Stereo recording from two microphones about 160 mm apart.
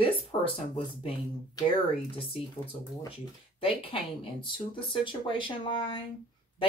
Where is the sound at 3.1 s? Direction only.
35° left (ahead or behind).